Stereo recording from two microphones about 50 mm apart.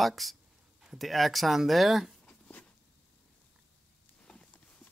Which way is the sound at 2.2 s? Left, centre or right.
Left.